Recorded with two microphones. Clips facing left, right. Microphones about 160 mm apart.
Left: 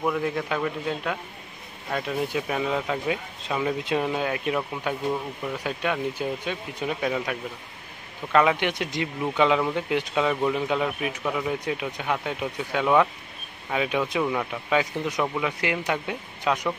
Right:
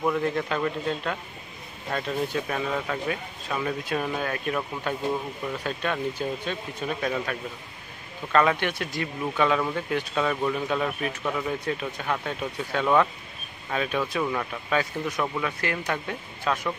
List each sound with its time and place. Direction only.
0.0 s speech: 5° left (ahead or behind)